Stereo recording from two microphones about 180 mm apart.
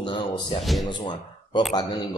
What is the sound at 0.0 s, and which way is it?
Music, 30° left (ahead or behind).